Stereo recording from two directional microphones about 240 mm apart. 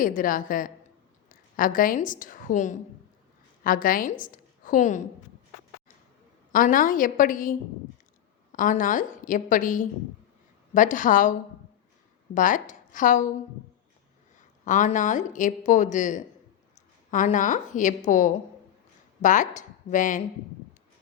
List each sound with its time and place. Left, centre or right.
0.0 s a woman's voice: left
6.5 s speech: left
8.5 s a woman's voice: left
14.3 s speech: left